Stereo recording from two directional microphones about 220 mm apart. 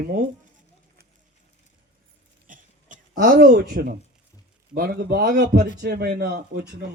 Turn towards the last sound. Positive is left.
turn(degrees=-50)  # may be behind; listen again after turning